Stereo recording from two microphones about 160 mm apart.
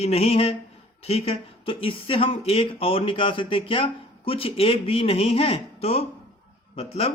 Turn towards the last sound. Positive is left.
turn(degrees=40)  # may be behind; listen again after turning